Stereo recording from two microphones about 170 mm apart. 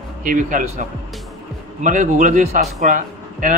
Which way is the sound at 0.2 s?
50° right (ahead or behind).